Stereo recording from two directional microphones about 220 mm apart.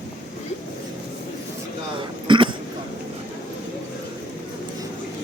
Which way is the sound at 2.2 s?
20° right (ahead or behind).